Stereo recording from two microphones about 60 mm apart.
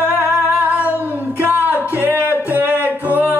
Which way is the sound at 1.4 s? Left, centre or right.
Right.